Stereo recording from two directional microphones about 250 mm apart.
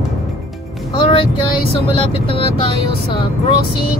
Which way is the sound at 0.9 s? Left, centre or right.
Centre.